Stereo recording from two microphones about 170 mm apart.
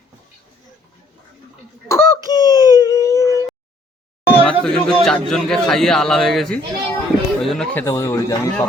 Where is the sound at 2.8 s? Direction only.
20° left (ahead or behind).